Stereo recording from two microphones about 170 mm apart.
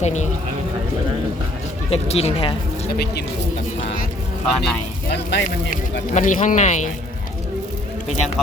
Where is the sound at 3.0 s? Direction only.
70° left (ahead or behind).